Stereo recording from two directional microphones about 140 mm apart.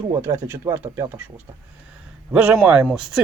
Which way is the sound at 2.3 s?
10° right (ahead or behind).